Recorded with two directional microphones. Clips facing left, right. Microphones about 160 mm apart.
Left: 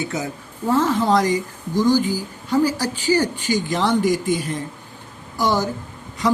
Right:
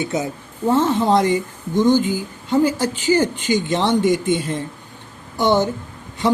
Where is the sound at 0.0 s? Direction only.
25° right (ahead or behind).